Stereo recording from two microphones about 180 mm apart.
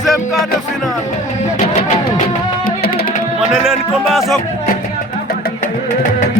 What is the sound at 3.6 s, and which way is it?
Music, centre (ahead or behind).